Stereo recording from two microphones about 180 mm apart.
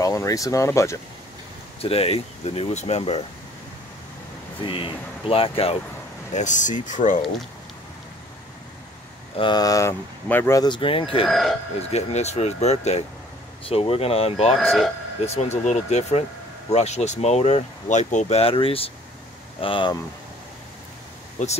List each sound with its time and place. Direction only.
0.0 s speech: 20° left (ahead or behind)
1.8 s speech: 35° left (ahead or behind)
4.6 s speech: 30° left (ahead or behind)
6.3 s speech: 45° left (ahead or behind)
9.4 s speech: 20° left (ahead or behind)
11.2 s speech: centre (ahead or behind)
11.9 s speech: 40° left (ahead or behind)
14.6 s speech: 5° left (ahead or behind)
15.2 s speech: 35° left (ahead or behind)
21.4 s speech: 40° left (ahead or behind)